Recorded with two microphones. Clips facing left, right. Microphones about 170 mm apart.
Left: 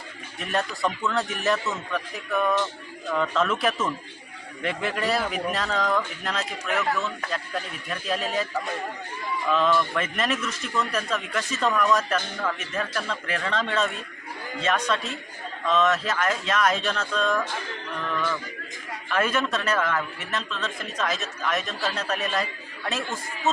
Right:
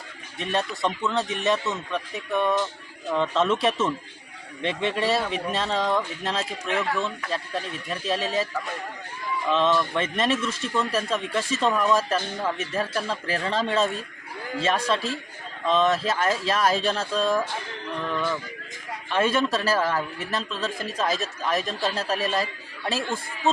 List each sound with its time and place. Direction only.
0.3 s speech: 25° right (ahead or behind)
9.5 s a man's voice: 25° right (ahead or behind)
19.0 s a man's voice: 30° right (ahead or behind)